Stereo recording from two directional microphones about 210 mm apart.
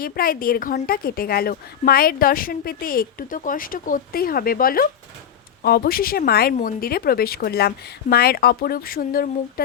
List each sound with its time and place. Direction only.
0.0 s speech: 45° left (ahead or behind)